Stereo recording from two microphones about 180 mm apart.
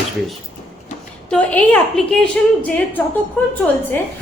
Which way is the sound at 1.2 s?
5° left (ahead or behind).